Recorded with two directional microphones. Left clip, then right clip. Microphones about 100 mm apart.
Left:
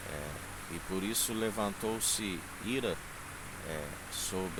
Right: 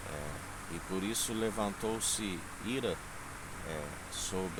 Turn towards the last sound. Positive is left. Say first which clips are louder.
# left 1 dB
turn(degrees=15)  # may be behind; listen again after turning